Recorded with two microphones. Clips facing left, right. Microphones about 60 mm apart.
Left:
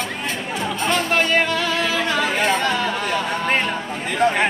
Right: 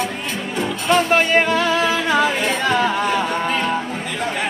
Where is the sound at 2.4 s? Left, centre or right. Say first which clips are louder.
Right 1 dB; centre.